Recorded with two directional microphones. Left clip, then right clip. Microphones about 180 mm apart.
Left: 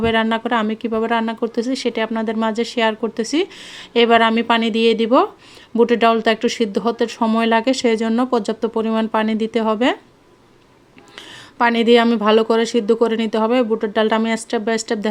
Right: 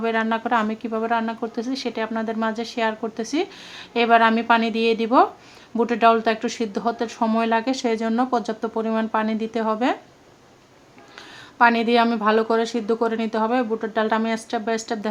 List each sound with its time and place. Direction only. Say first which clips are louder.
0.0 s speech: left 5 dB; 35° left (ahead or behind)
11.5 s speech: left 3 dB; 30° left (ahead or behind)